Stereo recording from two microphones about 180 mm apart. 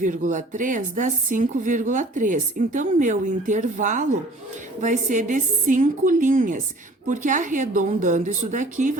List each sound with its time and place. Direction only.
0.0 s a woman's voice: 45° right (ahead or behind)